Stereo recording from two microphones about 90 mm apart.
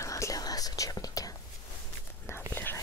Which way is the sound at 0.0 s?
35° left (ahead or behind).